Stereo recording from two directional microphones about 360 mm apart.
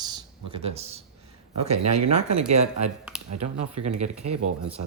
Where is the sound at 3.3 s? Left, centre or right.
Right.